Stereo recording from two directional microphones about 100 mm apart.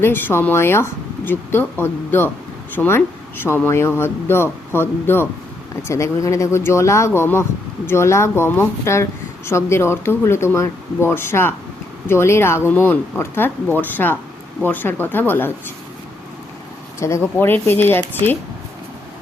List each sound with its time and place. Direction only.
0.0 s speech: 20° left (ahead or behind)
17.0 s speech: 25° left (ahead or behind)